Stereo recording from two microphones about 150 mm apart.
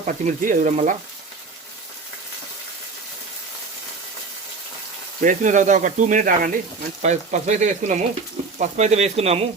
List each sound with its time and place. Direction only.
0.0 s speech: 55° right (ahead or behind)
5.2 s speech: 60° right (ahead or behind)
7.0 s speech: 50° right (ahead or behind)